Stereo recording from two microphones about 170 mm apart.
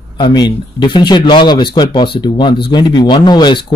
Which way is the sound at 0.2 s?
25° left (ahead or behind).